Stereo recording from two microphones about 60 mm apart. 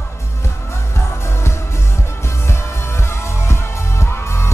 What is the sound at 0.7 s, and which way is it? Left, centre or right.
Music, left.